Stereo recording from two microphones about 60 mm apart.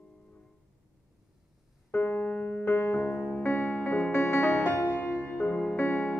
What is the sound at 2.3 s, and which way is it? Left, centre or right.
Music, left.